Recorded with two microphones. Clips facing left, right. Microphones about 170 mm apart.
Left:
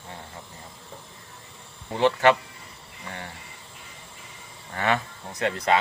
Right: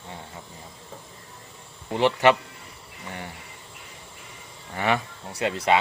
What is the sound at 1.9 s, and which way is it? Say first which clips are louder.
Speech: even; 15° right (ahead or behind).